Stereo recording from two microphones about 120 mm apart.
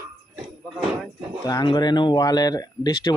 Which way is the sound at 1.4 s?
30° left (ahead or behind).